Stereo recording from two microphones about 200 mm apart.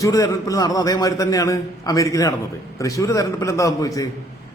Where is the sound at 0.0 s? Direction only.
15° left (ahead or behind).